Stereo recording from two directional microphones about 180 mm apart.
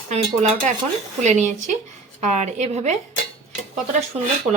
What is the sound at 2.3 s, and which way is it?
Speech, 40° right (ahead or behind).